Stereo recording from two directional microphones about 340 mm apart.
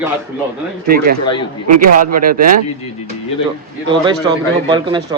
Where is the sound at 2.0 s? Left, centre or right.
Right.